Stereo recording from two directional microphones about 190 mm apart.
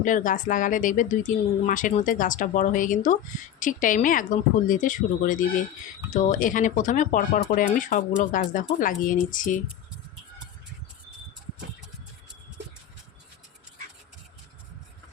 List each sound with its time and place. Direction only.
0.0 s speech: 45° left (ahead or behind)